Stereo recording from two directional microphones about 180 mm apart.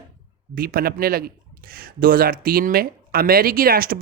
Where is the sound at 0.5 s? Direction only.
55° right (ahead or behind).